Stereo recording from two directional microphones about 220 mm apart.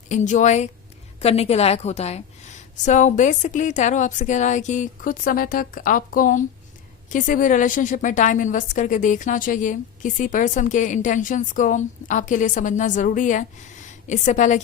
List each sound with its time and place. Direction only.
0.1 s a woman's voice: 35° left (ahead or behind)